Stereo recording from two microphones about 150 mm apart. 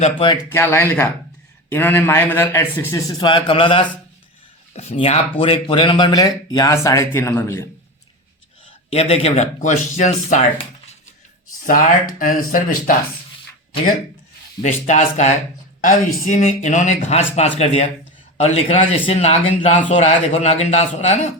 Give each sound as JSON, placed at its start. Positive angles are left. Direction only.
{"t": 0.0, "sound": "a man's voice", "side_deg": 35}
{"t": 0.5, "sound": "a man's voice", "side_deg": 15}
{"t": 3.1, "sound": "a man's voice", "side_deg": 30}
{"t": 4.7, "sound": "a man's voice", "side_deg": 45}
{"t": 8.9, "sound": "a man's voice", "side_deg": 40}
{"t": 11.6, "sound": "speech", "side_deg": 65}
{"t": 14.6, "sound": "a man's voice", "side_deg": 50}